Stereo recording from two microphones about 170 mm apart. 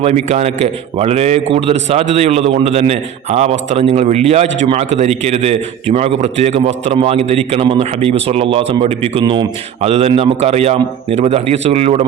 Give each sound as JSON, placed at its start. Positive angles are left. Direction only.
{"t": 0.0, "sound": "a man's voice", "side_deg": -40}